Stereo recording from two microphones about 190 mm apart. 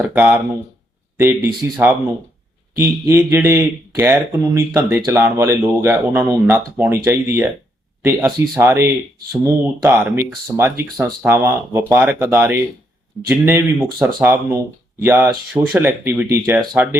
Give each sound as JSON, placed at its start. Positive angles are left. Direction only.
{"t": 0.0, "sound": "speech", "side_deg": -10}